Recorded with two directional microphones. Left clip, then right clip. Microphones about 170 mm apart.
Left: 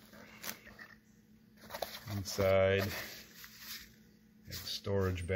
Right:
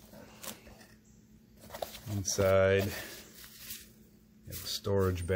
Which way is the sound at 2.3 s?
20° right (ahead or behind).